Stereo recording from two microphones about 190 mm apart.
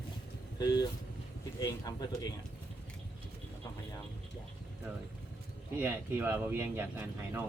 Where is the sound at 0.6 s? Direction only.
20° left (ahead or behind).